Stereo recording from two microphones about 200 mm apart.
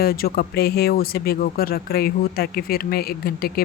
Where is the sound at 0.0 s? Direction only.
50° left (ahead or behind).